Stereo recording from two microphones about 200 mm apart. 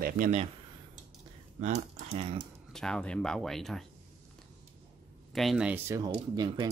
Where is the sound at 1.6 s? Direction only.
35° right (ahead or behind).